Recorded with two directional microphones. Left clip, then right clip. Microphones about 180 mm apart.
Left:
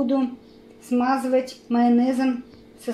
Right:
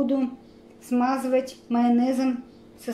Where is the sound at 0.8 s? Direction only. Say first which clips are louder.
Left 2 dB; 15° left (ahead or behind).